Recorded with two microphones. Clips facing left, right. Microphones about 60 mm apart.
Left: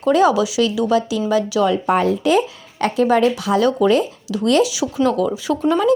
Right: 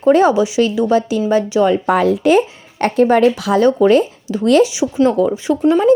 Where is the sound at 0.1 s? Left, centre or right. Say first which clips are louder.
Right 3 dB; right.